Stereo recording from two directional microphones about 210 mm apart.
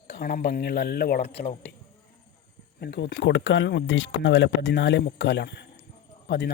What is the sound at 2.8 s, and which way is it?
Speech, 55° left (ahead or behind).